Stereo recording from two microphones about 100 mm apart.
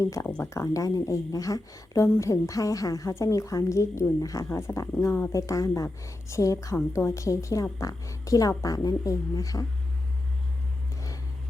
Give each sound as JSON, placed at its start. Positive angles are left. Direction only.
{"t": 0.0, "sound": "a woman's voice", "side_deg": 30}